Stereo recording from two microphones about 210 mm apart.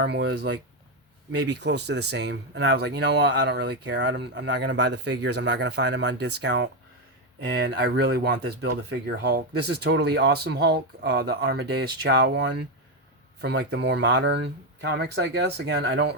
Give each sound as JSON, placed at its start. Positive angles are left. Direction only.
{"t": 0.0, "sound": "speech", "side_deg": -50}